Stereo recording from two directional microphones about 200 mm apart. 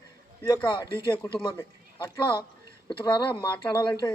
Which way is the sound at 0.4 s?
15° left (ahead or behind).